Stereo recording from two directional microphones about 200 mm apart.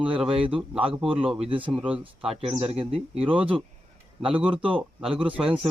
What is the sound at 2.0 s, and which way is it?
Speech, 30° right (ahead or behind).